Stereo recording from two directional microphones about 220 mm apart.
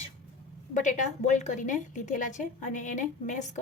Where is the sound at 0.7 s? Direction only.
35° left (ahead or behind).